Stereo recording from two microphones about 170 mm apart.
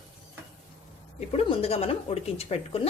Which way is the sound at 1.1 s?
35° left (ahead or behind).